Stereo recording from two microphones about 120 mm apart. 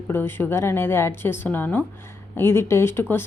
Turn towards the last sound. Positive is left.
turn(degrees=20)  # may be behind; listen again after turning